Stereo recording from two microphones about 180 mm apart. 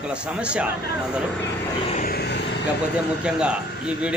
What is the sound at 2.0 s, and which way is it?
Vehicle, 60° left (ahead or behind).